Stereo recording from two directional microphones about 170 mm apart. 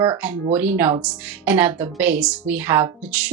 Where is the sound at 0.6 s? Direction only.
10° right (ahead or behind).